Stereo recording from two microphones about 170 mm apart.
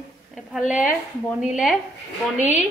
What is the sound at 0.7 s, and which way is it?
Speech, 5° right (ahead or behind).